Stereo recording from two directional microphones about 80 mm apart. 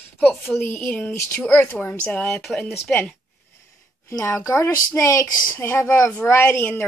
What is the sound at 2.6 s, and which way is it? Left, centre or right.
Speech, left.